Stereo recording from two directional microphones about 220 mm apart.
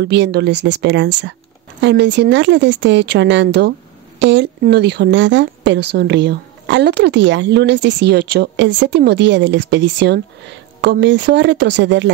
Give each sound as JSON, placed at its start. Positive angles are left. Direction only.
{"t": 0.0, "sound": "a woman's voice", "side_deg": -50}